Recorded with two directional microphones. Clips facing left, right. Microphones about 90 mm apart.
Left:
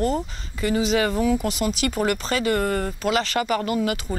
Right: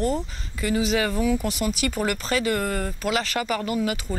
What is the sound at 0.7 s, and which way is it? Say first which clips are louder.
Speech: left 2 dB; 30° left (ahead or behind).